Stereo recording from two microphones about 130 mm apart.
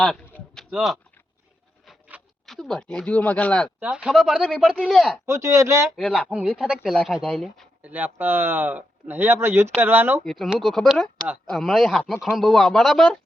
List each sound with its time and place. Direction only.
0.5 s a sound: centre (ahead or behind)
2.1 s a sound: 10° right (ahead or behind)
2.5 s speech: 5° left (ahead or behind)
3.8 s speech: 10° right (ahead or behind)
5.2 s speech: 20° right (ahead or behind)
6.1 s speech: 5° right (ahead or behind)
7.8 s speech: 10° right (ahead or behind)
10.2 s speech: centre (ahead or behind)